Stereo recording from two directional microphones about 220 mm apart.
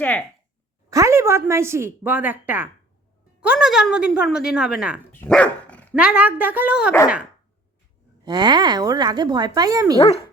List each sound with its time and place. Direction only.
0.0 s speech: 5° left (ahead or behind)
0.9 s a woman's voice: 15° right (ahead or behind)
5.1 s dog: 5° left (ahead or behind)
6.0 s speech: 5° right (ahead or behind)
8.2 s speech: 20° right (ahead or behind)
10.0 s speech: 25° left (ahead or behind)